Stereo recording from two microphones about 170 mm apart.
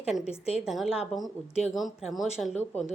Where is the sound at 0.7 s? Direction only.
Centre (ahead or behind).